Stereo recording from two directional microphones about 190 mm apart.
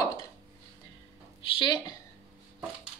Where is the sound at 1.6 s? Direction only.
25° left (ahead or behind).